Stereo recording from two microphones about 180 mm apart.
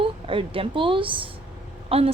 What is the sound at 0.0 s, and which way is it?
A woman's voice, 30° right (ahead or behind).